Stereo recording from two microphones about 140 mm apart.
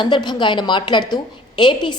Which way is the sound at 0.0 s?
30° left (ahead or behind).